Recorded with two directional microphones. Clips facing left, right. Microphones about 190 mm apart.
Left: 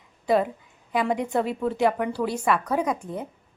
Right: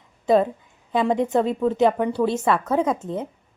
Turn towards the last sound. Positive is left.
turn(degrees=-25)  # may be behind; listen again after turning